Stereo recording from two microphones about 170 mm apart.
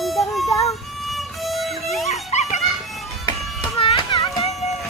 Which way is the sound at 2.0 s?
40° left (ahead or behind).